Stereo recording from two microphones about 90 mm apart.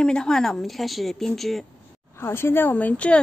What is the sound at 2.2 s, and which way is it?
A woman's voice, 25° left (ahead or behind).